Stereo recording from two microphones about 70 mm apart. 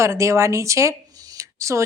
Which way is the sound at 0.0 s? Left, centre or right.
Right.